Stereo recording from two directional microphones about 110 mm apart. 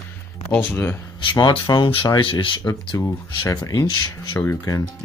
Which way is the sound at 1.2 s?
45° left (ahead or behind).